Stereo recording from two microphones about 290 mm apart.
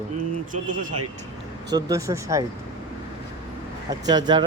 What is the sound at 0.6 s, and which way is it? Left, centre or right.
Speech, right.